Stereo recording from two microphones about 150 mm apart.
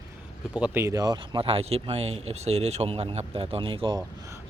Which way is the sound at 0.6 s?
15° right (ahead or behind).